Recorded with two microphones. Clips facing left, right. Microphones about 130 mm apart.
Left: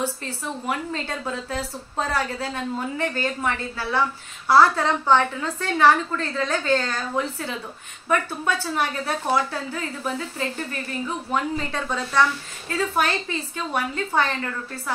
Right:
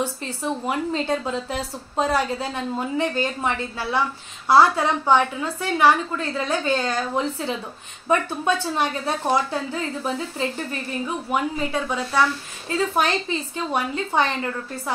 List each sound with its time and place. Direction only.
0.0 s a woman's voice: 20° right (ahead or behind)
11.2 s a woman's voice: 10° right (ahead or behind)